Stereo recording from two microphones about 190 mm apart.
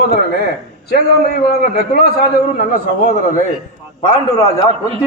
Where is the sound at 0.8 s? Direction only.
55° left (ahead or behind).